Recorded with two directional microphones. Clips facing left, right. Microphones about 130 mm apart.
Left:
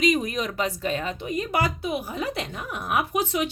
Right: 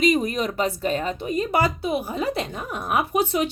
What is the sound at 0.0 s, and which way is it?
Speech, 30° right (ahead or behind).